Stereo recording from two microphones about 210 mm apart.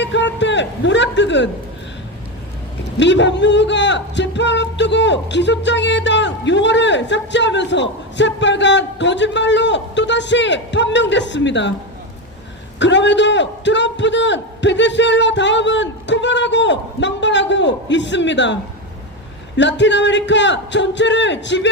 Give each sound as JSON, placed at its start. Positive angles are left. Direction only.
{"t": 0.0, "sound": "a sound", "side_deg": 60}
{"t": 3.0, "sound": "a man's voice", "side_deg": 60}
{"t": 12.8, "sound": "a man's voice", "side_deg": 60}
{"t": 19.5, "sound": "a man's voice", "side_deg": 60}